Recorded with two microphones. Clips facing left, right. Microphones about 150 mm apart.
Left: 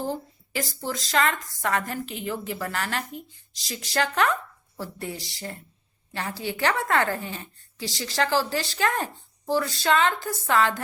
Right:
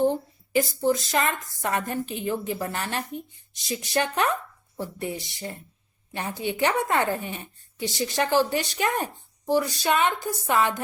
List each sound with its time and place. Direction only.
0.0 s a woman's voice: 20° right (ahead or behind)